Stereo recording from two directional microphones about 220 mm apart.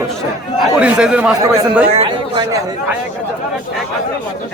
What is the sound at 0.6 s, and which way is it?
A man's voice, 5° right (ahead or behind).